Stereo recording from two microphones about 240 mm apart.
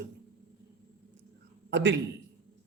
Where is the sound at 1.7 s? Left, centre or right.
Right.